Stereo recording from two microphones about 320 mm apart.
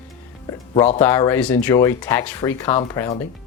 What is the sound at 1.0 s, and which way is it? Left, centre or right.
Speech, centre.